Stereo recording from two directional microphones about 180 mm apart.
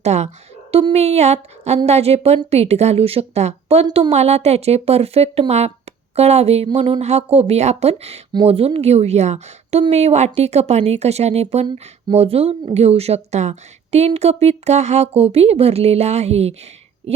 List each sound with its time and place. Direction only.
0.0 s speech: 35° right (ahead or behind)
3.8 s a woman's voice: 25° right (ahead or behind)
4.1 s speech: 35° right (ahead or behind)